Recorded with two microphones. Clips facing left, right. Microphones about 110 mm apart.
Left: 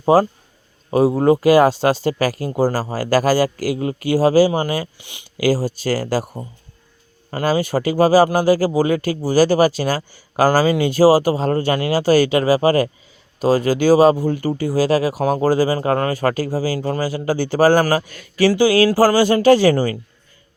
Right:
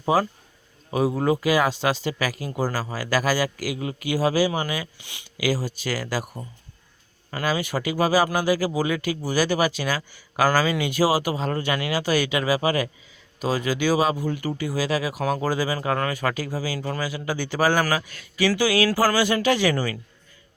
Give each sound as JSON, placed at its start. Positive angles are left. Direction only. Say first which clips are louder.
{"t": 0.0, "sound": "a man's voice", "louder": "left 8 dB", "side_deg": 40}
{"t": 18.5, "sound": "speech", "louder": "left 7 dB", "side_deg": 30}